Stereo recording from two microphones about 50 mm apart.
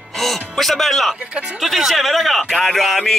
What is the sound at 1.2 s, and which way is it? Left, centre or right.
Speech, right.